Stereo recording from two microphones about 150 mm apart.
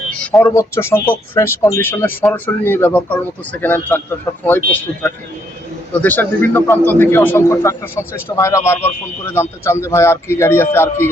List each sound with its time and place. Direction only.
0.4 s a man's voice: 20° left (ahead or behind)